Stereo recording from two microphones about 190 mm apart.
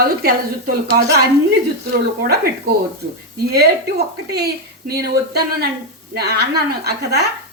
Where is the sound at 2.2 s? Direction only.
50° right (ahead or behind).